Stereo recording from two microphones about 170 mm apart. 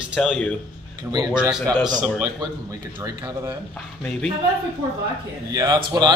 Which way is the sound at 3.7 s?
5° left (ahead or behind).